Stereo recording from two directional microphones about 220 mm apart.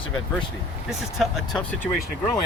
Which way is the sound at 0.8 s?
Centre (ahead or behind).